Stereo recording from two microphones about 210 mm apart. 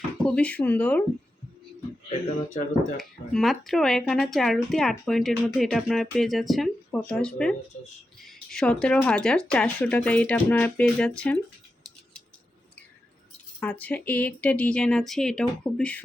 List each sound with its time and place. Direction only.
0.3 s speech: 5° left (ahead or behind)
2.0 s speech: 35° left (ahead or behind)
3.0 s speech: centre (ahead or behind)
8.5 s speech: 5° left (ahead or behind)
13.6 s speech: 5° left (ahead or behind)